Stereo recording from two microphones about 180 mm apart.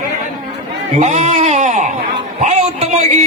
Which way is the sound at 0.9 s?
40° right (ahead or behind).